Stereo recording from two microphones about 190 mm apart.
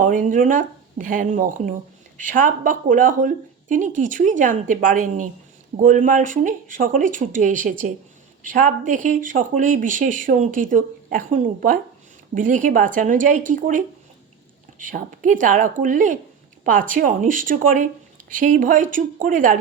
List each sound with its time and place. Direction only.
0.0 s speech: 45° right (ahead or behind)